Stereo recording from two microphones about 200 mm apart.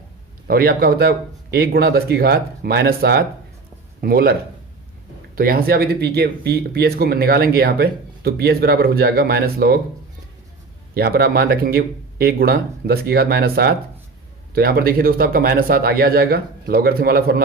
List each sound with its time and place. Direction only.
0.4 s speech: 50° right (ahead or behind)
5.4 s speech: 50° right (ahead or behind)
10.9 s speech: 50° right (ahead or behind)